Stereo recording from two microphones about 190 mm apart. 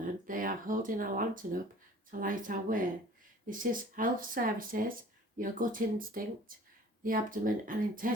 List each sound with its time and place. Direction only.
0.0 s speech: 45° right (ahead or behind)